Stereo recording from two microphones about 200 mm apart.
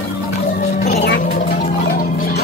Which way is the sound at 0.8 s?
55° left (ahead or behind).